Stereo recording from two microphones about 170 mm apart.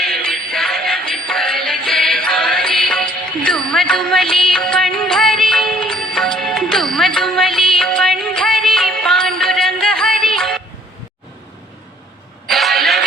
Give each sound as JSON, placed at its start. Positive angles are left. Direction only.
{"t": 0.0, "sound": "music", "side_deg": 0}
{"t": 4.5, "sound": "music of bollywood", "side_deg": 5}
{"t": 5.1, "sound": "music", "side_deg": 0}
{"t": 12.5, "sound": "vehicle", "side_deg": 0}